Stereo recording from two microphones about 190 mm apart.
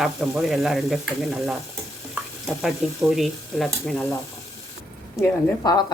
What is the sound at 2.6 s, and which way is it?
Speech, centre (ahead or behind).